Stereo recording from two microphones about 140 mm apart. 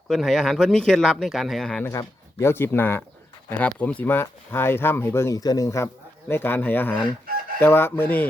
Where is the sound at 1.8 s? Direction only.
20° left (ahead or behind).